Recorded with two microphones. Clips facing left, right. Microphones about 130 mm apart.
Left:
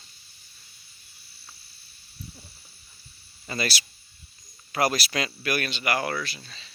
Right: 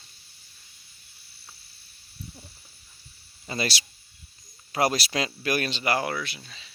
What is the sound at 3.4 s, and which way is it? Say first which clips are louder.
Speech: even; 25° right (ahead or behind).